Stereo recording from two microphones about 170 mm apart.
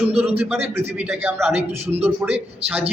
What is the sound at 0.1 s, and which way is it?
Speech, 35° right (ahead or behind).